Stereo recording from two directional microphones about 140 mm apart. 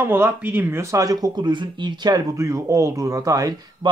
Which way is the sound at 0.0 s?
15° right (ahead or behind).